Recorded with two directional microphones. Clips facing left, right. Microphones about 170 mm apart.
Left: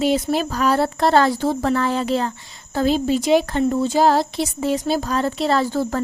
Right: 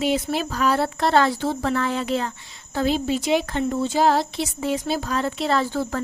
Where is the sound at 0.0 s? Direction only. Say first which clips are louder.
Left 4 dB; 40° left (ahead or behind).